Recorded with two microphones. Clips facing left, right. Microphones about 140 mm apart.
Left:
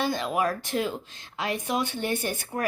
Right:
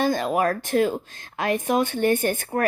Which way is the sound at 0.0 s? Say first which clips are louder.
Right 5 dB; 45° right (ahead or behind).